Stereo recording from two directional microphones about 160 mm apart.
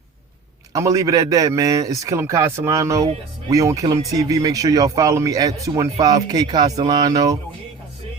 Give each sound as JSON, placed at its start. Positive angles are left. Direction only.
{"t": 0.7, "sound": "speech", "side_deg": -20}